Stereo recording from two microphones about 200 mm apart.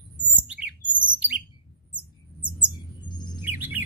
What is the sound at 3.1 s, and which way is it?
Bird, 20° left (ahead or behind).